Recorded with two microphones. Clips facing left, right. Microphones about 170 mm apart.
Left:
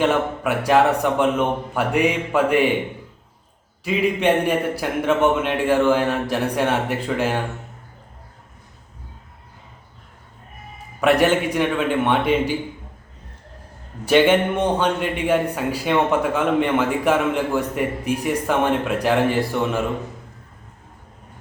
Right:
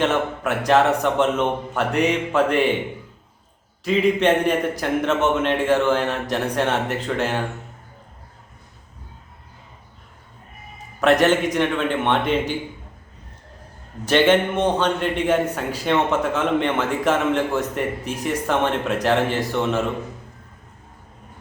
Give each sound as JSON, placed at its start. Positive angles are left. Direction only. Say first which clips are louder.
{"t": 0.0, "sound": "a man's voice", "louder": "left 1 dB", "side_deg": 10}
{"t": 3.8, "sound": "a man's voice", "louder": "right 1 dB", "side_deg": 10}
{"t": 11.0, "sound": "a man's voice", "louder": "even", "side_deg": 10}
{"t": 14.0, "sound": "a man's voice", "louder": "left 1 dB", "side_deg": 10}